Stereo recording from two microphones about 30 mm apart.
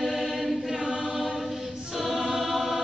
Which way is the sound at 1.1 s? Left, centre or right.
Centre.